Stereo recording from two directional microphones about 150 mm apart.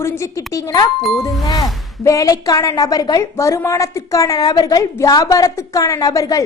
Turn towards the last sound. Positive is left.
turn(degrees=20)  # may be behind; listen again after turning